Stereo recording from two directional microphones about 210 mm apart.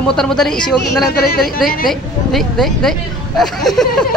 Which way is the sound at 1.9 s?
Centre (ahead or behind).